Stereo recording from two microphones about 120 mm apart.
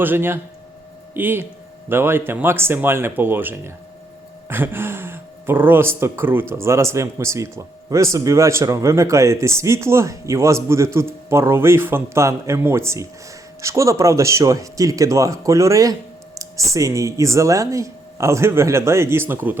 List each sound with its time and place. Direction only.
0.0 s speech: 15° right (ahead or behind)